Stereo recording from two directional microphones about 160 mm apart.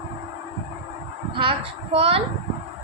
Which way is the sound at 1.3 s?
35° right (ahead or behind).